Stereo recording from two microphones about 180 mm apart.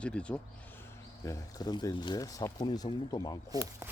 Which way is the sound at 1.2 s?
20° left (ahead or behind).